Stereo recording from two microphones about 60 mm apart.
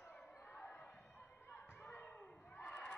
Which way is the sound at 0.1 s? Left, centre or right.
Left.